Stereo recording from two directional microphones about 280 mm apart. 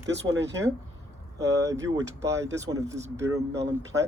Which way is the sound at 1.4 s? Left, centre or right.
Centre.